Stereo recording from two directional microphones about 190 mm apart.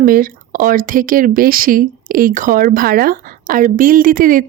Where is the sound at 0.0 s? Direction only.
45° right (ahead or behind).